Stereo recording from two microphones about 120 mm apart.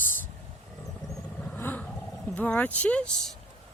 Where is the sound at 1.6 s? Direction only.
15° left (ahead or behind).